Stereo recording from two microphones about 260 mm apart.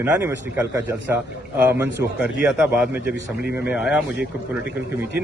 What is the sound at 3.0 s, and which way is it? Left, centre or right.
Speech, left.